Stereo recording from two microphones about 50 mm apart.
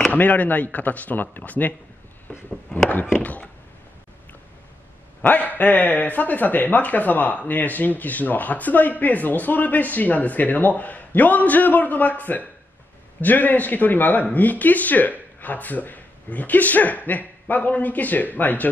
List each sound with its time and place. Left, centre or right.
0.1 s speech: left
5.2 s speech: left